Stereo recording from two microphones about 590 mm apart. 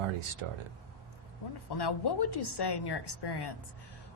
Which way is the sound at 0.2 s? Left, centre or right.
Right.